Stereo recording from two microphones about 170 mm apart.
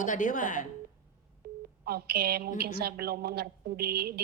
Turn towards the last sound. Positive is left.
turn(degrees=-65)  # may be behind; listen again after turning